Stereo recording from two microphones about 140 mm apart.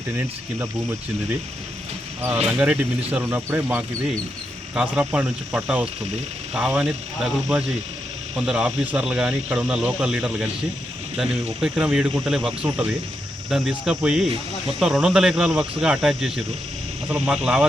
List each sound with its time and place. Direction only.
0.2 s speech: 15° right (ahead or behind)
2.5 s speech: 10° right (ahead or behind)